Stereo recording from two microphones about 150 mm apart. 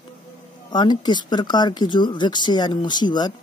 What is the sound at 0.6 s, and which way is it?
Speech, 30° left (ahead or behind).